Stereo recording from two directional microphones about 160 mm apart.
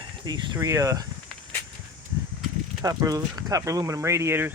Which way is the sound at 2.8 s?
20° right (ahead or behind).